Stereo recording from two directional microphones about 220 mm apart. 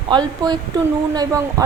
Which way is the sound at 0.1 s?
20° right (ahead or behind).